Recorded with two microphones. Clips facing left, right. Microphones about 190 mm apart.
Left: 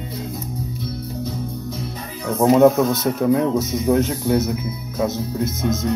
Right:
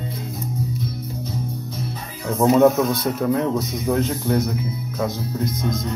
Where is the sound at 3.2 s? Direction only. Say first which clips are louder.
Left 4 dB; 5° left (ahead or behind).